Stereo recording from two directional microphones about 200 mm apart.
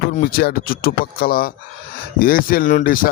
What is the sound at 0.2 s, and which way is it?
Speech, 45° left (ahead or behind).